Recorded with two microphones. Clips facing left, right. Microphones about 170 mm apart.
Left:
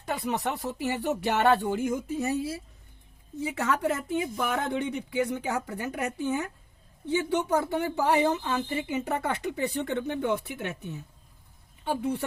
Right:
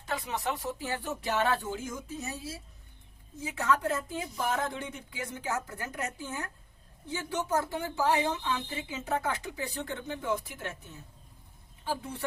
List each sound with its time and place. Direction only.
0.0 s speech: 65° left (ahead or behind)
11.9 s speech: 65° left (ahead or behind)